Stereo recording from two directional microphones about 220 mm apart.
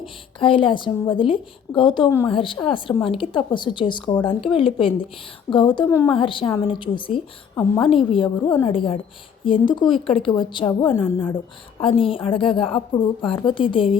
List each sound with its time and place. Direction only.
0.0 s a woman's voice: 25° left (ahead or behind)